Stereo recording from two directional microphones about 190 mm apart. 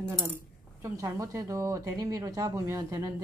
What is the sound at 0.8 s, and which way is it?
Speech, 15° right (ahead or behind).